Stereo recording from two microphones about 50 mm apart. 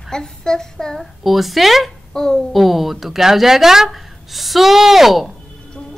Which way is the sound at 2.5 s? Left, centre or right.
Centre.